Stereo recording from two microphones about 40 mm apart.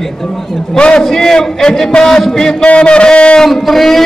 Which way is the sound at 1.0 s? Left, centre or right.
Centre.